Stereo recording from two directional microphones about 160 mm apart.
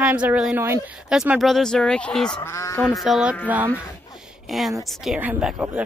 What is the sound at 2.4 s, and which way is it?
Speech, 15° left (ahead or behind).